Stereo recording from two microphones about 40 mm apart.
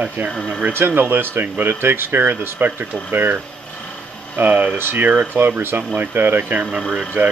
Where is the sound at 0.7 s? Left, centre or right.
Right.